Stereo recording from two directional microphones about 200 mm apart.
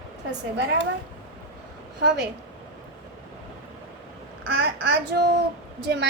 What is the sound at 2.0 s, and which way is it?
Speech, 60° right (ahead or behind).